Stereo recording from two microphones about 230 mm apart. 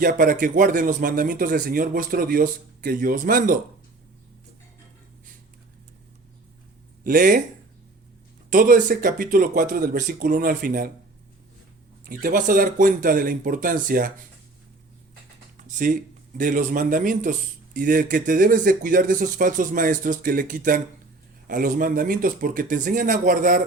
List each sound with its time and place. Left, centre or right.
0.0 s speech: right
7.0 s speech: right
8.4 s speech: right
12.0 s speech: right
15.5 s a sound: right
16.4 s speech: right